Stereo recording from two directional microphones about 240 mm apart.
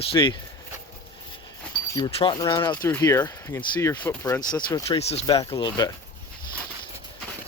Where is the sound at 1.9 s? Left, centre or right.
Centre.